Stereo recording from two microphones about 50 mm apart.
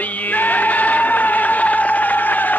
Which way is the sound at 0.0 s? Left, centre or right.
Left.